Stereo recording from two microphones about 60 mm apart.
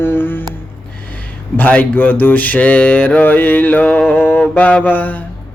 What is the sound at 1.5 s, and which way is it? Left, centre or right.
Speech, left.